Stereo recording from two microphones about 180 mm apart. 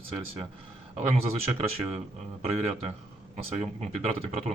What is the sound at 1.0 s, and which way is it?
Speech, 35° right (ahead or behind).